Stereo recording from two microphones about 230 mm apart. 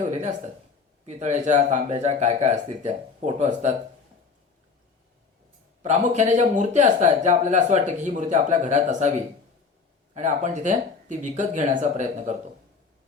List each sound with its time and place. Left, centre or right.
0.0 s speech: right
5.8 s speech: right
10.2 s speech: right